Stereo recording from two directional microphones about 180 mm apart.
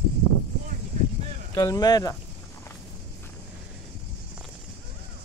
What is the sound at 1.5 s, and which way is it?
Speech, 20° left (ahead or behind).